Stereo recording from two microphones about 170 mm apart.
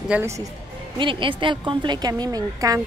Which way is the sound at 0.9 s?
30° right (ahead or behind).